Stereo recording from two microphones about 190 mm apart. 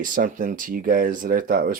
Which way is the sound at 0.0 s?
45° right (ahead or behind).